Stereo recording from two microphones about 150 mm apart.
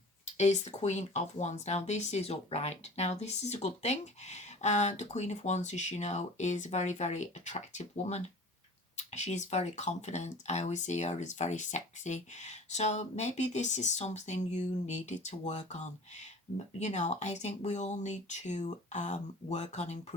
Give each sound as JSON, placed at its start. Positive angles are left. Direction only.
{"t": 0.3, "sound": "speech", "side_deg": 50}